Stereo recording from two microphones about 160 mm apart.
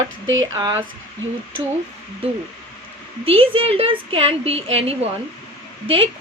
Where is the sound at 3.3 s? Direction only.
35° right (ahead or behind).